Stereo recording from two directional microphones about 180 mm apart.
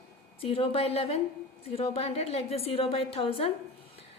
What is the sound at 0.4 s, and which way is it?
A woman's voice, 30° left (ahead or behind).